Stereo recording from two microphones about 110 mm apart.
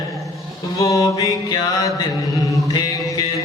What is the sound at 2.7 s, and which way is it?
Music, 35° left (ahead or behind).